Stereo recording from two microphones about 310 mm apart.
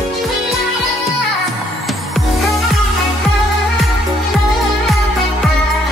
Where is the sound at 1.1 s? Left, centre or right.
Left.